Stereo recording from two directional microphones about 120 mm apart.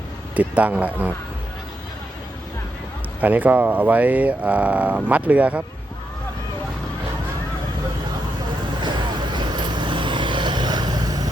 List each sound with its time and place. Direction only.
0.3 s speech: 10° right (ahead or behind)
3.2 s speech: 15° right (ahead or behind)
8.8 s vehicle: 40° right (ahead or behind)